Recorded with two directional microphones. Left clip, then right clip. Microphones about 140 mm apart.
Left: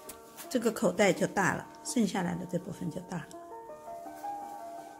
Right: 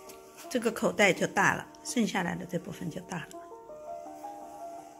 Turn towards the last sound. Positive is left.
turn(degrees=15)  # may be behind; listen again after turning